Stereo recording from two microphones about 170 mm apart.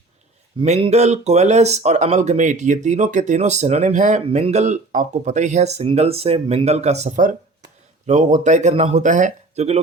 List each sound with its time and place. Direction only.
0.6 s speech: 40° right (ahead or behind)